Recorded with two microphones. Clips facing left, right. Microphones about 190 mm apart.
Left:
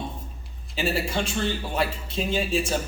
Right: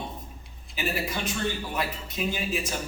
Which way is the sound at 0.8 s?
30° left (ahead or behind).